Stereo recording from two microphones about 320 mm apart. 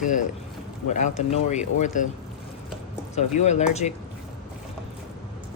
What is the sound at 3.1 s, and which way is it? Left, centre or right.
Cutlery, left.